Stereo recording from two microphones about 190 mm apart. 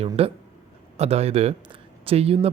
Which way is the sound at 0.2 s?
30° right (ahead or behind).